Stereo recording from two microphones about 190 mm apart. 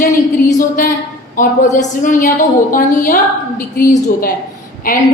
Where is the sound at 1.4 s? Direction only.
40° left (ahead or behind).